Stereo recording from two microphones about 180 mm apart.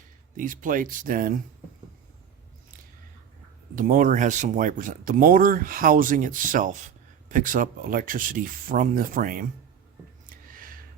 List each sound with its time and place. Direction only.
0.3 s speech: 45° right (ahead or behind)
3.8 s speech: 50° right (ahead or behind)
10.5 s a sound: 50° right (ahead or behind)